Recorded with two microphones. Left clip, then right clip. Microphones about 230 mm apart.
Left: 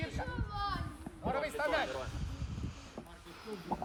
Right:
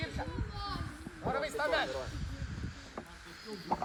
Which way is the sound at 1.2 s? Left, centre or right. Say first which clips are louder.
Right 1 dB; right.